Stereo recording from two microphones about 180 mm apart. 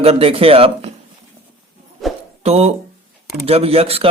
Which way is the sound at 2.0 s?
Centre (ahead or behind).